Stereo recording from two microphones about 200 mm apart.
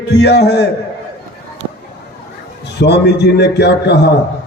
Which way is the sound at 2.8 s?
60° left (ahead or behind).